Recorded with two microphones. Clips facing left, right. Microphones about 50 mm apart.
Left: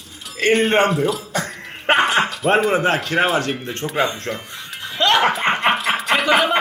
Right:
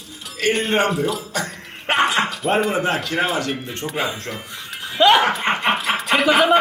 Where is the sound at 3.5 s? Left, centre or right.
Centre.